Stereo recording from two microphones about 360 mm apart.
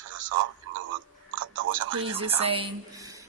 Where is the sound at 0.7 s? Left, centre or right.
Right.